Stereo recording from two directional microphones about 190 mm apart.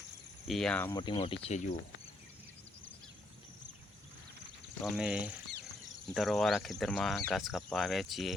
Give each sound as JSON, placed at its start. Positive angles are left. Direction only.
{"t": 0.4, "sound": "speech", "side_deg": 0}
{"t": 0.9, "sound": "speech", "side_deg": 25}
{"t": 4.8, "sound": "speech", "side_deg": 0}